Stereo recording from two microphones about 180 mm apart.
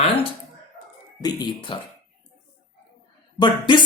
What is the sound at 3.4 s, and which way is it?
Speech, 25° left (ahead or behind).